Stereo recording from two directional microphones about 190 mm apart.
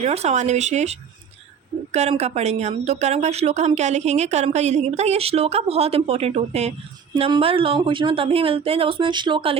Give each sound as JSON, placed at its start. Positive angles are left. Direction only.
{"t": 0.0, "sound": "a woman's voice", "side_deg": -35}